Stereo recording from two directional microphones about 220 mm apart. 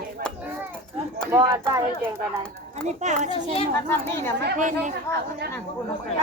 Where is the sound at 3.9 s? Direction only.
10° left (ahead or behind).